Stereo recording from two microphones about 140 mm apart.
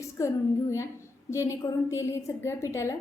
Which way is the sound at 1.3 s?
20° left (ahead or behind).